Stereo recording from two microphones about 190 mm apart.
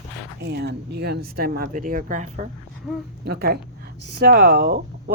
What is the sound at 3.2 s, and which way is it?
Speech, 55° right (ahead or behind).